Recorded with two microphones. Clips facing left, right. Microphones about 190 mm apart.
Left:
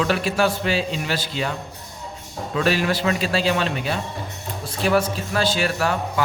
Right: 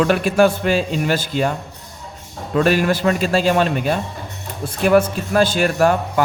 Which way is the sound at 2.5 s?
50° right (ahead or behind).